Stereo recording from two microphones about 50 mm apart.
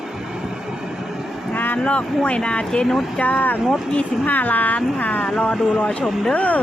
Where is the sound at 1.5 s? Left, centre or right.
Left.